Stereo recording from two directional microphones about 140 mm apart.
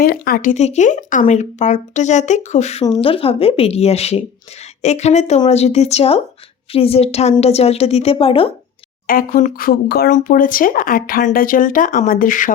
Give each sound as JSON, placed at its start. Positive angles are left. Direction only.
{"t": 0.0, "sound": "speech", "side_deg": 90}
{"t": 0.5, "sound": "speech", "side_deg": 55}
{"t": 2.9, "sound": "speech", "side_deg": 40}
{"t": 9.0, "sound": "speech", "side_deg": 85}